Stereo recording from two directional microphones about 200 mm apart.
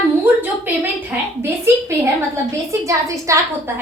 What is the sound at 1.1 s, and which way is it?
A woman's voice, 10° right (ahead or behind).